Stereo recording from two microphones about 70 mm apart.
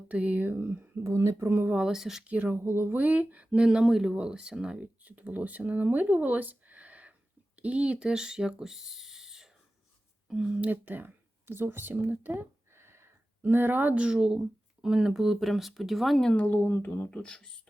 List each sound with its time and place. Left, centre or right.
0.1 s speech: right
1.0 s speech: right
1.5 s speech: right
1.8 s speech: centre
2.2 s speech: right
2.6 s speech: right
13.9 s speech: centre
16.3 s speech: left
17.1 s speech: centre